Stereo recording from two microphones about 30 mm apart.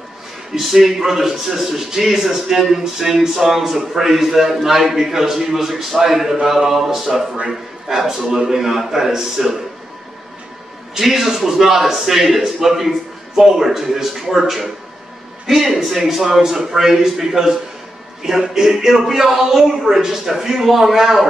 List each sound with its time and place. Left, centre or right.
0.6 s a man's voice: centre
11.0 s a man's voice: centre